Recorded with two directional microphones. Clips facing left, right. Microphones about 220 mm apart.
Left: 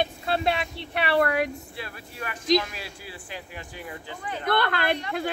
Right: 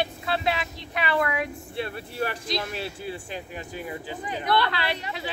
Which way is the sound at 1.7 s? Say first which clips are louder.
Right 8 dB; 30° right (ahead or behind).